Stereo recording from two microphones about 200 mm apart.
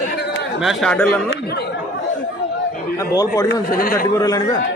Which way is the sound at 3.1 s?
15° left (ahead or behind).